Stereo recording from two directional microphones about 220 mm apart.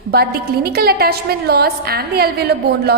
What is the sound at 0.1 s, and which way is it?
A woman's voice, 45° right (ahead or behind).